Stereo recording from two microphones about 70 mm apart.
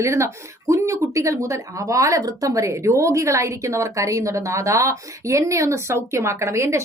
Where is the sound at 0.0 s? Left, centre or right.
Right.